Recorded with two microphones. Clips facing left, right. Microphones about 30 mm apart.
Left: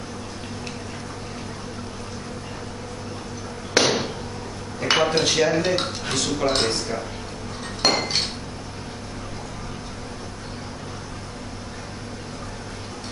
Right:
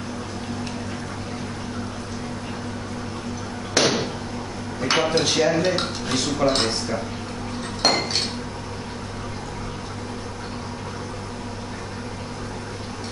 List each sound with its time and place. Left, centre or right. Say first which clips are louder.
3.8 s a sound: left 1 dB; centre
4.7 s speech: left 1 dB; centre
7.8 s dishes: even; centre